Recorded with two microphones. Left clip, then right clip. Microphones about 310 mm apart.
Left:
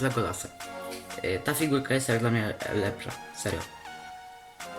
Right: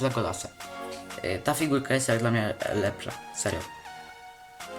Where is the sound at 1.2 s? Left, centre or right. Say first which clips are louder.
Right 1 dB; centre.